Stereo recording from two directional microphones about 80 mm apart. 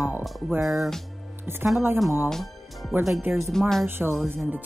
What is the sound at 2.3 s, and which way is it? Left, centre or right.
Music, centre.